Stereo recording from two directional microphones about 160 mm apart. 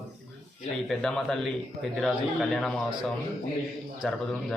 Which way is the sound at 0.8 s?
5° left (ahead or behind).